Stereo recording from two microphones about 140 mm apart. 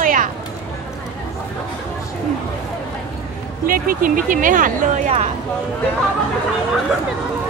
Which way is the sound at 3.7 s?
85° right.